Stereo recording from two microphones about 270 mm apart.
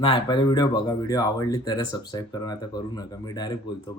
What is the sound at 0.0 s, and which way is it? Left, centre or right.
Speech, centre.